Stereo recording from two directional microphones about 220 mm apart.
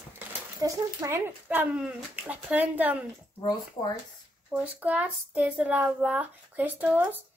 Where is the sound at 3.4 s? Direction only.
20° left (ahead or behind).